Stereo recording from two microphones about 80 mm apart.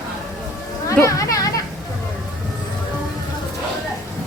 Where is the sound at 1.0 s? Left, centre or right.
Left.